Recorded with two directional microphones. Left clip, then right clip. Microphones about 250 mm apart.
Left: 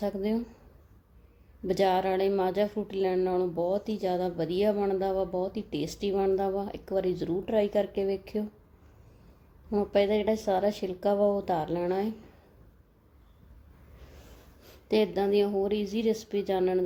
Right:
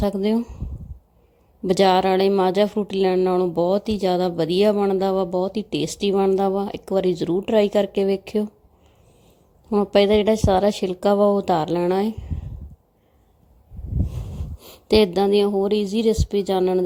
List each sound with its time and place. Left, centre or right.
0.0 s a woman's voice: right
1.6 s a woman's voice: right
9.6 s a woman's voice: right
14.7 s a woman's voice: right